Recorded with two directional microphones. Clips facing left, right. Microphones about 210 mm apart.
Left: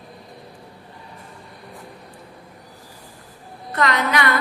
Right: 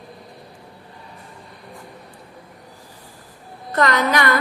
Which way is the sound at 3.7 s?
45° right (ahead or behind).